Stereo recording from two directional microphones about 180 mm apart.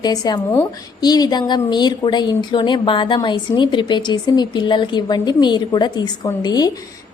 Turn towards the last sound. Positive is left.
turn(degrees=20)  # may be behind; listen again after turning